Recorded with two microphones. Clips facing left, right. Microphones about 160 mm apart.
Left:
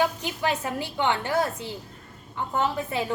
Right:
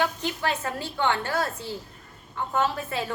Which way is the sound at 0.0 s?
10° left (ahead or behind).